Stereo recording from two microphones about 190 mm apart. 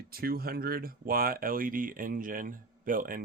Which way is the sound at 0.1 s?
50° right (ahead or behind).